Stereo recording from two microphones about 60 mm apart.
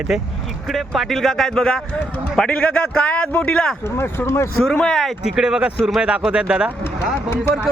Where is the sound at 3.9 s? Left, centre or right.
Left.